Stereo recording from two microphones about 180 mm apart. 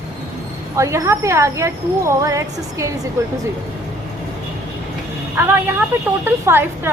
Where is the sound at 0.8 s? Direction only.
15° right (ahead or behind).